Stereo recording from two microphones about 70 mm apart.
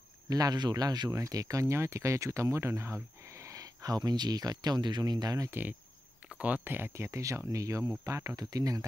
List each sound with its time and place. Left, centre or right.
0.3 s speech: right
1.1 s speech: right
5.5 s speech: right
6.9 s speech: right
8.4 s speech: right